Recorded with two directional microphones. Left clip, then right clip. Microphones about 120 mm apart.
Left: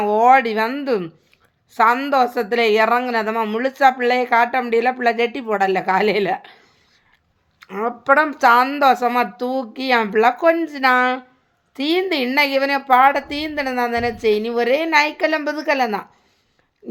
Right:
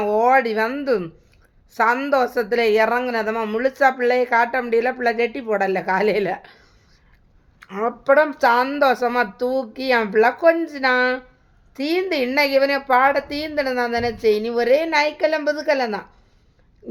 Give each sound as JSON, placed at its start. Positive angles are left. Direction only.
{"t": 0.0, "sound": "a woman's voice", "side_deg": 20}
{"t": 16.8, "sound": "pig", "side_deg": 15}